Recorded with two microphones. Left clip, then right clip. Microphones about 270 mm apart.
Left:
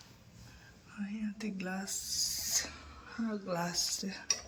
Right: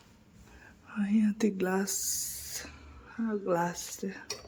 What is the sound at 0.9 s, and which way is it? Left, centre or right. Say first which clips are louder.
Speech: right 12 dB; right.